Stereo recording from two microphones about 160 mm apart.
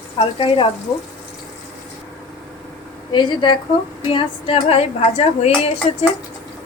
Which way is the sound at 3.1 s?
30° left (ahead or behind).